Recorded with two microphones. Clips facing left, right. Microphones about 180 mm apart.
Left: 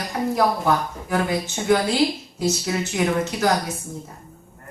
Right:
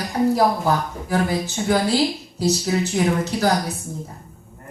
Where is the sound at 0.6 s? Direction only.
35° right (ahead or behind).